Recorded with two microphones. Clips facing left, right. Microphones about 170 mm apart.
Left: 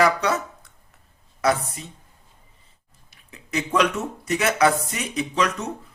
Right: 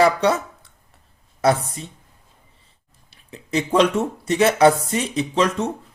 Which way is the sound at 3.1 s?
30° right (ahead or behind).